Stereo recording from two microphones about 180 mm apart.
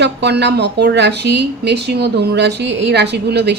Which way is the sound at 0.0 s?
70° right (ahead or behind).